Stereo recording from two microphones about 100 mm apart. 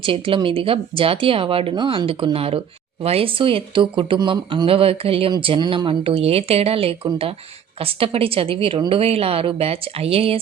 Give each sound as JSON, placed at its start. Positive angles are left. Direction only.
{"t": 0.0, "sound": "speech", "side_deg": -60}
{"t": 5.4, "sound": "speech", "side_deg": -55}
{"t": 8.9, "sound": "speech", "side_deg": -75}